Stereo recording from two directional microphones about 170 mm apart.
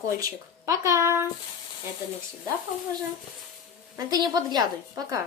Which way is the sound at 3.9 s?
25° right (ahead or behind).